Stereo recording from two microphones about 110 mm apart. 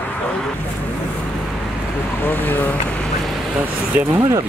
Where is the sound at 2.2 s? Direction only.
15° left (ahead or behind).